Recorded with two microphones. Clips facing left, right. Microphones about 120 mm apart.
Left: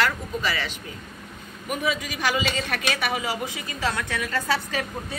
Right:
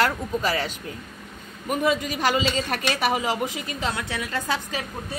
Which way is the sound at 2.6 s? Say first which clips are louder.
Right 3 dB; 30° right (ahead or behind).